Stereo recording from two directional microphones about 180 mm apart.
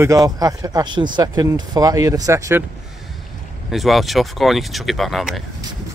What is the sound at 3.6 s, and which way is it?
Speech, centre (ahead or behind).